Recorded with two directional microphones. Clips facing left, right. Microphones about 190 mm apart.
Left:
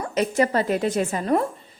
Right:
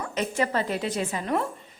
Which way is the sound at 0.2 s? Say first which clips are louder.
Left 5 dB; 40° left (ahead or behind).